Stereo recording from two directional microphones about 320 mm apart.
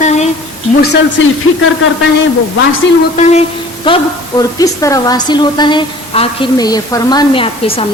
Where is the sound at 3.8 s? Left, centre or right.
Centre.